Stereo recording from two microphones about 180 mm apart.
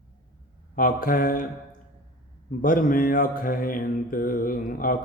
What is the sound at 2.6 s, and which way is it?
Speech, 50° left (ahead or behind).